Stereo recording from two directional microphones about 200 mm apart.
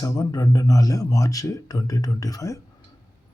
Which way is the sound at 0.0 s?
20° left (ahead or behind).